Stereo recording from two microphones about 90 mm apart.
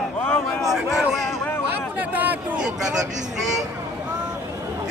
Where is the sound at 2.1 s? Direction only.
20° right (ahead or behind).